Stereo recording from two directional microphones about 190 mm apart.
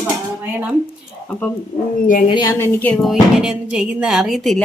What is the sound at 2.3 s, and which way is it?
Speech, 15° left (ahead or behind).